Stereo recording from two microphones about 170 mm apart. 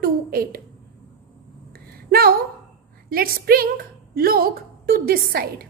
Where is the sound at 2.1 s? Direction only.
65° right (ahead or behind).